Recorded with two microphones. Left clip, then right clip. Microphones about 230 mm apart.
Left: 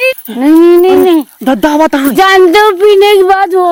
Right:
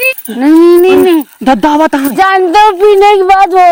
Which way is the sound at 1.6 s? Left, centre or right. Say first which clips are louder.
Left 3 dB; centre.